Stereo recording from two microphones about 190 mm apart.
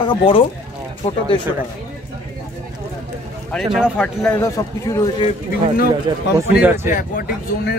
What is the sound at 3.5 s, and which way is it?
Speech, centre (ahead or behind).